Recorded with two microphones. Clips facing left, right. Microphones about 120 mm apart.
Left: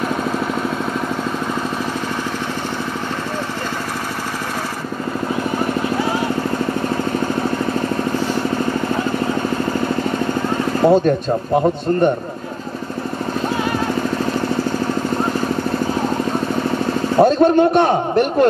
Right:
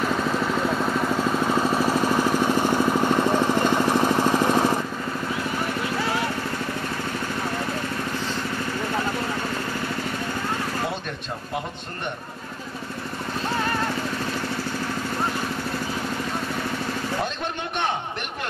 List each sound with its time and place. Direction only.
10.8 s speech: 40° left (ahead or behind)
17.2 s a man's voice: 40° left (ahead or behind)